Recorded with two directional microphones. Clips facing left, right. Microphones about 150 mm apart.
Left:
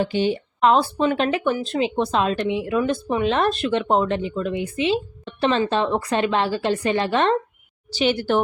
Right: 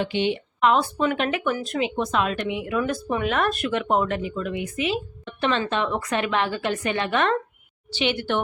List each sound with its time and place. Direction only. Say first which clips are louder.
0.0 s speech: left 3 dB; 40° left (ahead or behind)